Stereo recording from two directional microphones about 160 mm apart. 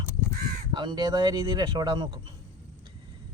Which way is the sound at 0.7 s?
25° right (ahead or behind).